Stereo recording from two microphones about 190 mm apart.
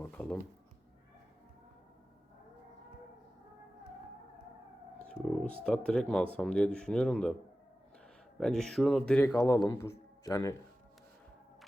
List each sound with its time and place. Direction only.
0.0 s speech: 10° left (ahead or behind)
4.9 s speech: 5° left (ahead or behind)
8.4 s speech: 5° left (ahead or behind)
9.3 s speech: 15° left (ahead or behind)